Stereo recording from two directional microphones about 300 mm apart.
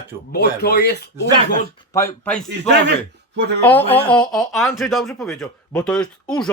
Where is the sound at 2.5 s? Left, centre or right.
Right.